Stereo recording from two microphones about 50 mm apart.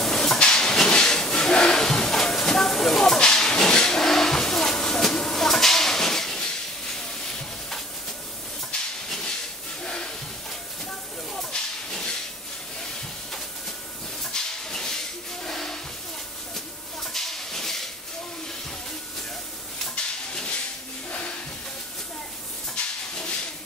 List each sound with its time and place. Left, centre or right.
0.0 s a sound: centre
9.8 s hiss: centre
11.3 s hiss: centre
14.2 s hiss: centre
15.4 s a sound: centre
17.1 s hiss: centre
21.1 s hiss: left
22.8 s hiss: centre